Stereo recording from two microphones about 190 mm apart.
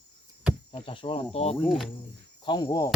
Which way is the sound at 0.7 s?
30° left (ahead or behind).